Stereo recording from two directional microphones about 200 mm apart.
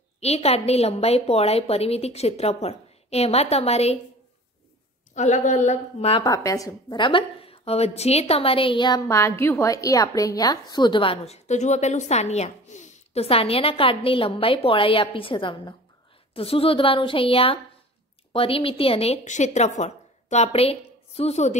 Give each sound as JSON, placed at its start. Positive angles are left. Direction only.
{"t": 0.2, "sound": "a woman's voice", "side_deg": 30}
{"t": 5.1, "sound": "a woman's voice", "side_deg": 35}